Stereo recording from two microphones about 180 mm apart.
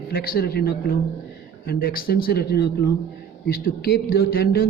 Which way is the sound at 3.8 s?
60° left (ahead or behind).